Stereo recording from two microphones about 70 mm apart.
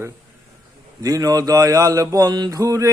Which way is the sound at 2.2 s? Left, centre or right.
Right.